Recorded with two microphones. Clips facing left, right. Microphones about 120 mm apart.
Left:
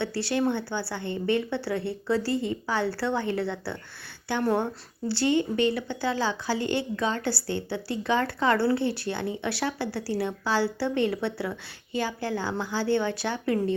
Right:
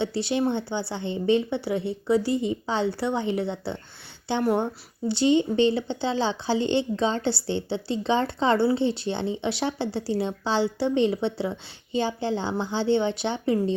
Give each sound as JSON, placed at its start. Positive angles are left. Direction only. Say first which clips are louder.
{"t": 0.0, "sound": "a woman's voice", "louder": "right 2 dB", "side_deg": -20}